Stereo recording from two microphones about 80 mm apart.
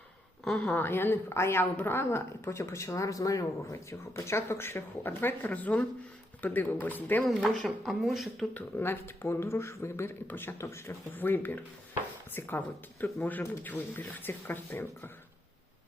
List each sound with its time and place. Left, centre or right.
0.6 s speech: left
4.1 s speech: left
7.2 s speech: centre
8.5 s speech: left